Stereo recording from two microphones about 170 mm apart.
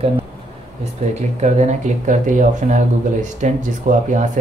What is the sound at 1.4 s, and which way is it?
Speech, 45° right (ahead or behind).